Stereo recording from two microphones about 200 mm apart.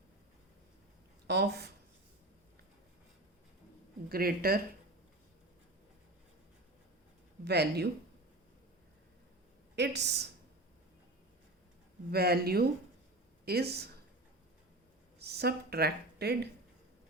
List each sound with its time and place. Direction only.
1.3 s speech: 55° right (ahead or behind)
4.1 s speech: 50° right (ahead or behind)
7.4 s speech: 55° right (ahead or behind)
9.7 s speech: 55° right (ahead or behind)
12.1 s speech: 50° right (ahead or behind)
15.2 s speech: 50° right (ahead or behind)